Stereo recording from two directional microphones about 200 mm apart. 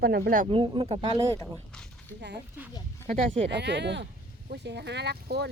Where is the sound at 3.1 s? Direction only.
35° right (ahead or behind).